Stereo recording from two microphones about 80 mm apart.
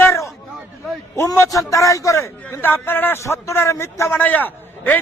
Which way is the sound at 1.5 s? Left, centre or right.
Left.